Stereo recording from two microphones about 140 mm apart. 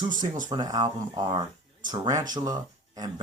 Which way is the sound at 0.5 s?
30° right (ahead or behind).